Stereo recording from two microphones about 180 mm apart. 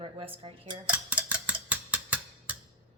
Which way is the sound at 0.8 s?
10° right (ahead or behind).